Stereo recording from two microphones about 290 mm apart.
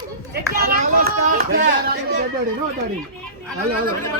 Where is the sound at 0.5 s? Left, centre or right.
Right.